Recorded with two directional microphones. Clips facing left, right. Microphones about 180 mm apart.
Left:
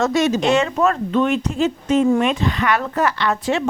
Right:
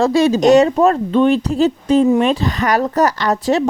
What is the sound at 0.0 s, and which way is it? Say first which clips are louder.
A woman's voice: right 5 dB; 30° right (ahead or behind).